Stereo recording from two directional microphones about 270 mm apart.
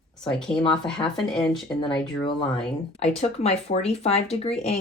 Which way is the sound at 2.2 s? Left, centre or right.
Centre.